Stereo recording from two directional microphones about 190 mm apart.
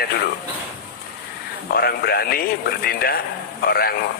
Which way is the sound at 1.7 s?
55° left (ahead or behind).